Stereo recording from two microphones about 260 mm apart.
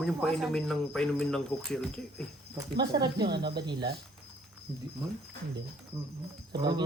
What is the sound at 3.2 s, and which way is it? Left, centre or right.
Speech, right.